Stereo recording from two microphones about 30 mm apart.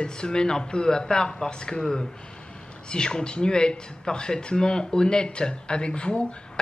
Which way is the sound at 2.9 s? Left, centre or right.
Left.